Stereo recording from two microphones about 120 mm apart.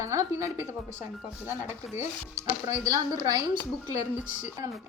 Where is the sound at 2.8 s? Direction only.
30° right (ahead or behind).